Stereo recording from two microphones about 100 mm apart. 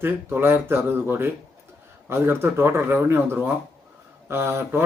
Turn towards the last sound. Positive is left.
turn(degrees=-25)  # may be behind; listen again after turning